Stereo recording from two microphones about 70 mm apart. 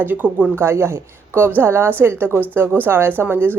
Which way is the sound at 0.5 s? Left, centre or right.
Right.